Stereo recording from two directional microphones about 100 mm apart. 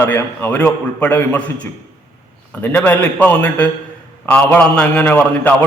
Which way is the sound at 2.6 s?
15° left (ahead or behind).